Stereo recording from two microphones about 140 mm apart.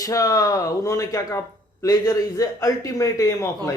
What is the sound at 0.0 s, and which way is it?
A man's voice, 25° left (ahead or behind).